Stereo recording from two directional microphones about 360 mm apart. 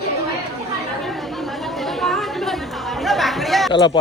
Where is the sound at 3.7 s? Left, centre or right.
Centre.